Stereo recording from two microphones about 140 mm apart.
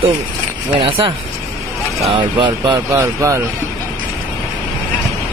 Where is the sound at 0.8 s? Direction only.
40° right (ahead or behind).